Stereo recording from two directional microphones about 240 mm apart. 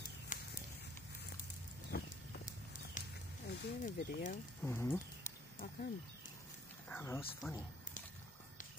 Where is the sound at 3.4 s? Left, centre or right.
Left.